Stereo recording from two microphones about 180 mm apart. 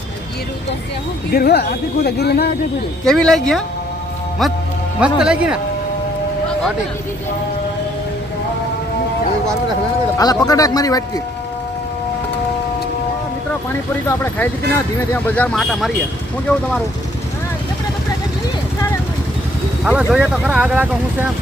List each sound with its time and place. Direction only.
1.3 s speech: 60° left (ahead or behind)
3.0 s speech: 5° left (ahead or behind)
4.9 s speech: 5° right (ahead or behind)
10.2 s speech: 20° left (ahead or behind)
14.1 s speech: 10° left (ahead or behind)
15.5 s speech: centre (ahead or behind)
19.8 s speech: 5° right (ahead or behind)